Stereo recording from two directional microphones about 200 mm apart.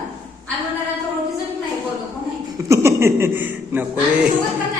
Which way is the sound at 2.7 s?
15° right (ahead or behind).